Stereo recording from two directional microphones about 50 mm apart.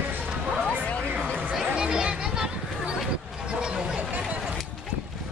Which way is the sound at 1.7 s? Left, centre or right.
Centre.